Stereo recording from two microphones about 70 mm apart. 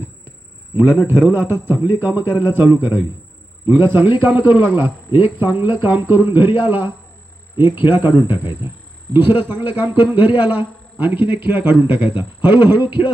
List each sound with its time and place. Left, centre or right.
1.0 s a man's voice: right